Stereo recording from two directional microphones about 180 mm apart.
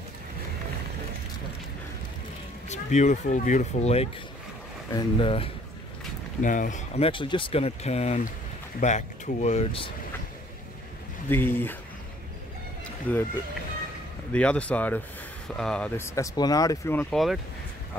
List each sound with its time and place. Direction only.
2.7 s speech: 40° left (ahead or behind)
6.4 s speech: 45° left (ahead or behind)
7.1 s speech: 30° left (ahead or behind)
11.2 s speech: 10° left (ahead or behind)
13.1 s speech: 10° left (ahead or behind)
14.3 s speech: 5° left (ahead or behind)
16.2 s speech: 20° left (ahead or behind); by 17.4 s centre (ahead or behind)